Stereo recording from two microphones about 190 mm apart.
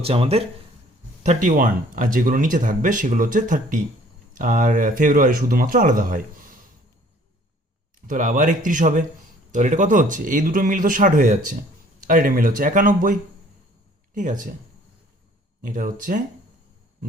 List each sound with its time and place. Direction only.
0.0 s speech: 30° right (ahead or behind); by 6.2 s 45° right (ahead or behind)
8.0 s speech: 45° right (ahead or behind)
14.2 s speech: 45° right (ahead or behind)
15.6 s speech: 45° right (ahead or behind)